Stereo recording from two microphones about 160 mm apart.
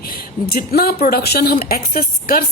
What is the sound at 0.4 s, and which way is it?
A woman's voice, 70° left (ahead or behind).